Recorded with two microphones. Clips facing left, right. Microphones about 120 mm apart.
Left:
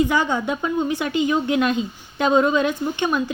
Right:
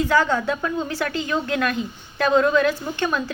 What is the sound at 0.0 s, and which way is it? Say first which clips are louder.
A woman's voice: even; 15° left (ahead or behind).